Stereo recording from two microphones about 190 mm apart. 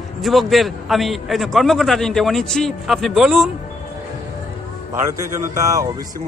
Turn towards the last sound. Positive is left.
turn(degrees=-15)  # may be behind; listen again after turning